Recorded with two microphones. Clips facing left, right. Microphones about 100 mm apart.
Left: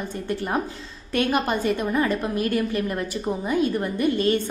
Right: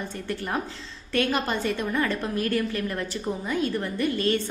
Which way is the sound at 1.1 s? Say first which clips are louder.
Left 3 dB; 15° left (ahead or behind).